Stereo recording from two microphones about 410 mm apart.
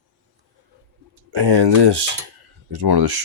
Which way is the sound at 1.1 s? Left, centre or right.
Right.